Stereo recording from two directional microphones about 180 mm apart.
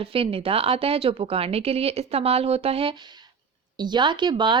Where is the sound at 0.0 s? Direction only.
30° right (ahead or behind).